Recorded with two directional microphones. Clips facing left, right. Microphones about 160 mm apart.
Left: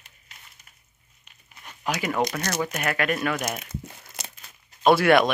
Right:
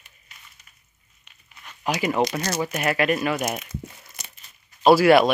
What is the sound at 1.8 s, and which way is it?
Speech, 10° right (ahead or behind).